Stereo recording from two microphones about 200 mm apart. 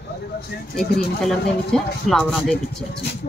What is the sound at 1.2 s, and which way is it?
Speech, centre (ahead or behind).